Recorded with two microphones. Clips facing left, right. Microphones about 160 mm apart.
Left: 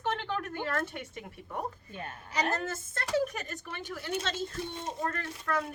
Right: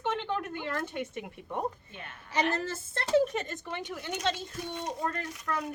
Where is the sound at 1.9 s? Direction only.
35° left (ahead or behind).